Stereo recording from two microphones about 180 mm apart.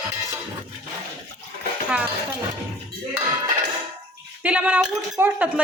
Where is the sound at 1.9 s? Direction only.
5° right (ahead or behind).